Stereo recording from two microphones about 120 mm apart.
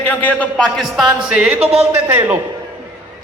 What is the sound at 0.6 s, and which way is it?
Speech, centre (ahead or behind).